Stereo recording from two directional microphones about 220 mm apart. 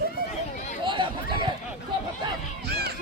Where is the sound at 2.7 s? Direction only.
45° right (ahead or behind).